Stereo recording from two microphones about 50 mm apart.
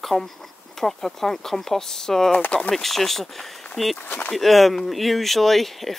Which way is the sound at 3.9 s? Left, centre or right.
Left.